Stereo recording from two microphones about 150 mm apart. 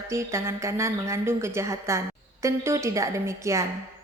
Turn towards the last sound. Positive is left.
turn(degrees=-20)  # may be behind; listen again after turning